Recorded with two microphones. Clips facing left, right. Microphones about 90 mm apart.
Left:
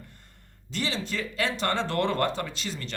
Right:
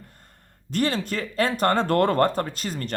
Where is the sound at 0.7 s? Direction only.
50° right (ahead or behind).